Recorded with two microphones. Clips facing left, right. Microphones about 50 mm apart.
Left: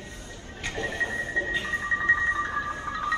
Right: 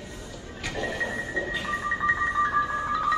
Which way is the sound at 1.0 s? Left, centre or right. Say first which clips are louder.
Left 1 dB; left.